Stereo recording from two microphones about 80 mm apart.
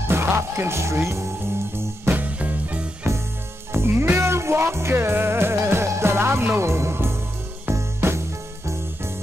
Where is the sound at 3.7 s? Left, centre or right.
Right.